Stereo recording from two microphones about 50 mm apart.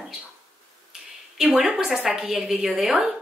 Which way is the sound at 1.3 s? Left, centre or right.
Centre.